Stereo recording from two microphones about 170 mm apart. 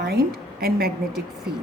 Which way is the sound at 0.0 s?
70° right (ahead or behind).